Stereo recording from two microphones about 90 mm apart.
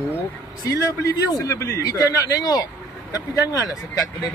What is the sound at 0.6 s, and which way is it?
A man's voice, 40° left (ahead or behind).